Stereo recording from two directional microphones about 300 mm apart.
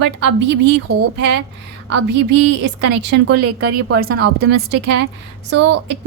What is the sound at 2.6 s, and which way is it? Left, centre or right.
Speech, right.